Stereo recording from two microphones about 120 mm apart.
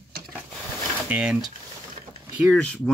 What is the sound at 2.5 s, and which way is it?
Speech, 10° left (ahead or behind).